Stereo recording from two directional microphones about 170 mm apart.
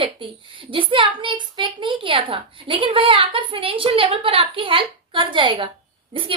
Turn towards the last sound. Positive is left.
turn(degrees=-30)  # may be behind; listen again after turning